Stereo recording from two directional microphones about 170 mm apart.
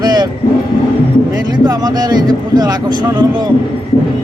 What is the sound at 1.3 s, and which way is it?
Speech, 20° right (ahead or behind).